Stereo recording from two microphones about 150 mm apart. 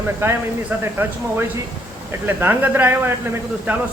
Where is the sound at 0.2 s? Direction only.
15° right (ahead or behind).